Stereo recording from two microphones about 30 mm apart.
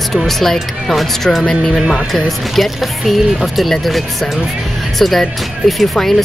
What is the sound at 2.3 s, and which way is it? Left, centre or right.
Speech, centre.